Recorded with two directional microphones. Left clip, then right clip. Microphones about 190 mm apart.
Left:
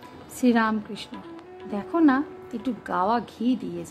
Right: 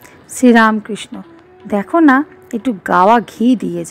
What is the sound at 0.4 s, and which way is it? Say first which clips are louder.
A woman's voice: right 13 dB; 40° right (ahead or behind).